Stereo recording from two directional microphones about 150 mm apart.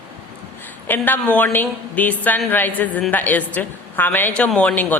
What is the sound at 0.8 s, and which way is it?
A woman's voice, 15° left (ahead or behind).